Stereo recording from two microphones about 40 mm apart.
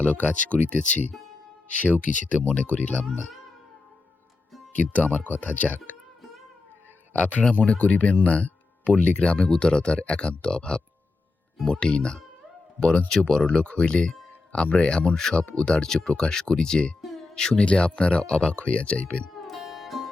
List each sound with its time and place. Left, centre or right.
0.0 s speech: left
5.0 s speech: left
7.2 s speech: left
15.1 s speech: centre; by 19.2 s left
19.4 s music: centre